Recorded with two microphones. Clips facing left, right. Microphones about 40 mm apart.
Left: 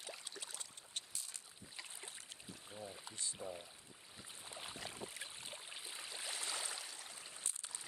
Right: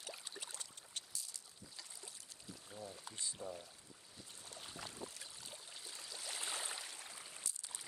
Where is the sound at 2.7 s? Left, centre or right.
Left.